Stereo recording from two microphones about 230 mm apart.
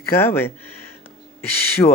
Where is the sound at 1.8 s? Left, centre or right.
Left.